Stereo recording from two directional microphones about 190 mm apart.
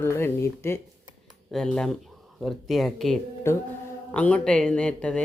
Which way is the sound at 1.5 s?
5° left (ahead or behind).